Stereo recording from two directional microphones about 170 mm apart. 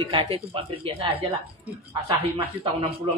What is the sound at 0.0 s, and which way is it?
A man's voice, 30° right (ahead or behind).